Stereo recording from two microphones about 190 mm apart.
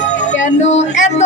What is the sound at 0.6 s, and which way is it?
Music, 35° left (ahead or behind).